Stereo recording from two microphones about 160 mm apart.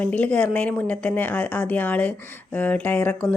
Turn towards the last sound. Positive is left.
turn(degrees=10)  # may be behind; listen again after turning